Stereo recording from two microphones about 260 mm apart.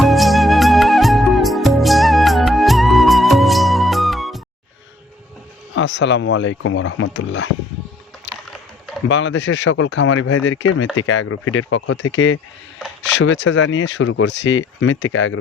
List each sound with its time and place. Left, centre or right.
0.0 s music: centre
5.7 s speech: left
8.3 s a sound: centre
9.0 s speech: left